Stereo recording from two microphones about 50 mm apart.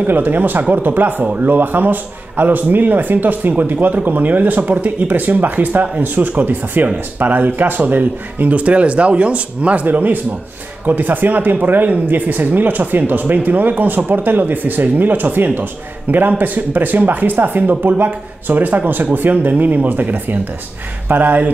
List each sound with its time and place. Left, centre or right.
0.0 s speech: right
9.8 s speech: right